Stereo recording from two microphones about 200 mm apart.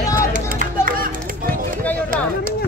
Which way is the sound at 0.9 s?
45° right (ahead or behind).